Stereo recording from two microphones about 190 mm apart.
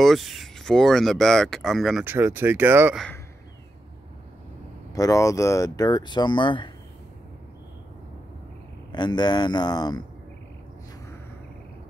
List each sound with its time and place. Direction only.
0.0 s speech: centre (ahead or behind)
2.0 s speech: 10° right (ahead or behind)
4.9 s speech: 20° left (ahead or behind)
8.9 s speech: 20° left (ahead or behind)